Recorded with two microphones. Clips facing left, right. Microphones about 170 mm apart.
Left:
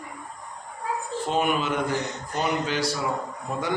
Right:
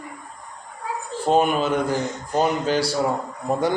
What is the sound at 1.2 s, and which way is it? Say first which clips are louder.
A man's voice: right 6 dB; 35° right (ahead or behind).